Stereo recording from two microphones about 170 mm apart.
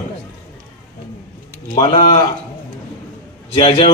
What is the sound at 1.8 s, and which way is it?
Speech, 30° left (ahead or behind).